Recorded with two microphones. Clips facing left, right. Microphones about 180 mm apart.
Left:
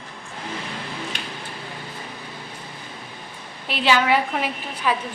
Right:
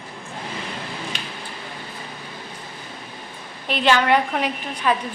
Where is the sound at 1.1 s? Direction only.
55° left (ahead or behind).